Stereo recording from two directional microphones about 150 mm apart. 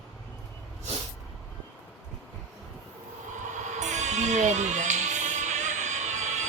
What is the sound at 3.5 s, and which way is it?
Music, 50° right (ahead or behind).